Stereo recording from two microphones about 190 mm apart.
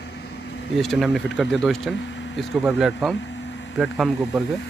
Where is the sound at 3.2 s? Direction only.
70° left (ahead or behind).